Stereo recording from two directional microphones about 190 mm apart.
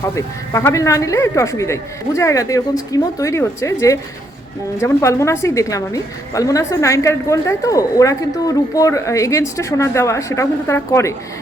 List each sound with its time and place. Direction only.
0.2 s a woman's voice: 15° left (ahead or behind)